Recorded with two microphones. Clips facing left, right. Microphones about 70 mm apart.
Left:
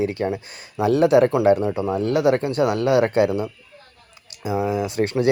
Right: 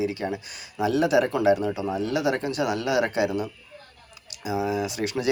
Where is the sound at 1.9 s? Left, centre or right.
Left.